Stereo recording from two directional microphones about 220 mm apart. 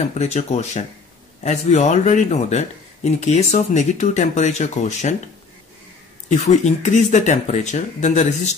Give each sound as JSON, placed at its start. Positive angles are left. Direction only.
{"t": 0.1, "sound": "speech", "side_deg": 30}
{"t": 6.2, "sound": "speech", "side_deg": 30}